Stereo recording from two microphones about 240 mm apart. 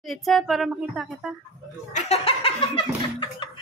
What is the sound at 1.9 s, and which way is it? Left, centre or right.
Speech, left.